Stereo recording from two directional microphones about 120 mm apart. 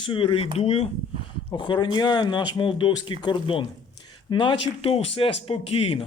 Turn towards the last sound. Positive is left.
turn(degrees=55)  # may be behind; listen again after turning